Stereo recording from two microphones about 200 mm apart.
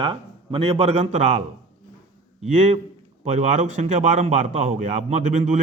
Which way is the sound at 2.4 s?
35° right (ahead or behind).